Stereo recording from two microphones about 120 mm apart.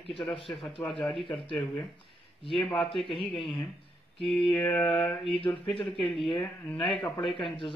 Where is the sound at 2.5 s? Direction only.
Centre (ahead or behind).